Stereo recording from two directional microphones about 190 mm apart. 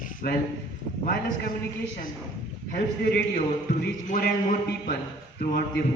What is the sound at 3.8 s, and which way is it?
Speech, 55° left (ahead or behind).